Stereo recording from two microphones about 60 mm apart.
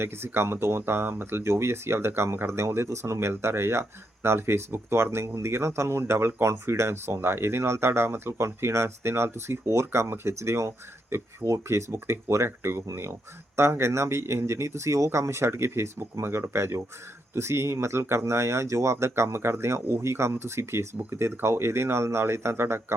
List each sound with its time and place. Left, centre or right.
0.0 s speech: right
11.7 s speech: right